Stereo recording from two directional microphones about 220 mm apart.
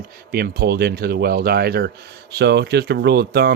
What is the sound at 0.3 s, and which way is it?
Speech, 45° right (ahead or behind).